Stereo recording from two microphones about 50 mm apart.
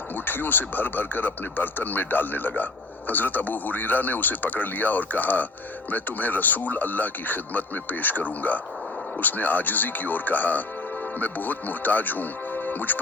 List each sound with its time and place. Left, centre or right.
0.3 s speech: left